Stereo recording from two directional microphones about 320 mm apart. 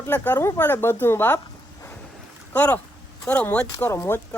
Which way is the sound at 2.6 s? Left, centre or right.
Centre.